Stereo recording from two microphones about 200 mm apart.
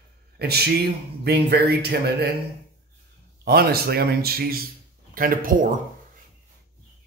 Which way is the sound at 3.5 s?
50° right (ahead or behind).